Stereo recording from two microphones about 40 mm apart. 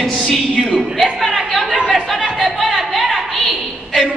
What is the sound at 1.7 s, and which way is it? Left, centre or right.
Chatter, centre.